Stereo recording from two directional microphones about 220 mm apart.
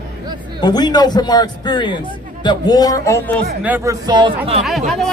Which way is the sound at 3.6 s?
10° right (ahead or behind).